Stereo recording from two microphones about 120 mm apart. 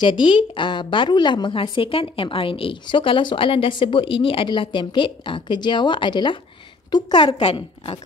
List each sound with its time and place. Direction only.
0.0 s a woman's voice: 40° left (ahead or behind)
7.5 s a woman's voice: 55° left (ahead or behind)